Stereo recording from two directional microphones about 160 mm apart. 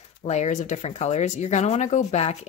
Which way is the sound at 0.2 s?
45° left (ahead or behind).